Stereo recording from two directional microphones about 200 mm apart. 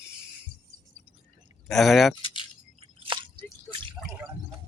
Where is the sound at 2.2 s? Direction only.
25° left (ahead or behind).